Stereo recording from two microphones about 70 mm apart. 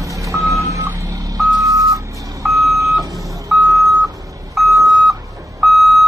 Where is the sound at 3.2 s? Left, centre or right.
Right.